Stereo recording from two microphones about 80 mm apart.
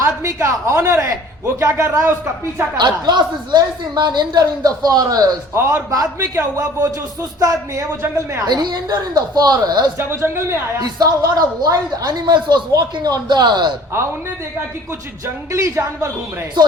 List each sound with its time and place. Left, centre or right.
0.0 s a woman's voice: right
2.7 s a woman's voice: right
8.0 s a woman's voice: right
8.4 s a woman's voice: right
10.0 s a woman's voice: right
10.8 s a woman's voice: right
12.2 s a woman's voice: right
15.5 s a woman's voice: right